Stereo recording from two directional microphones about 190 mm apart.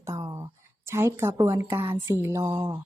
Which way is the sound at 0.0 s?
15° right (ahead or behind).